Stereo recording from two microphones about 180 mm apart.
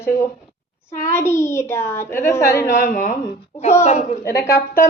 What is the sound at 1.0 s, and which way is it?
A child's voice, 15° left (ahead or behind).